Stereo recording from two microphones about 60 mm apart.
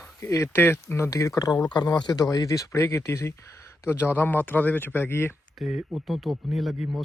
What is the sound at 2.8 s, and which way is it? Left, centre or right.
Speech, left.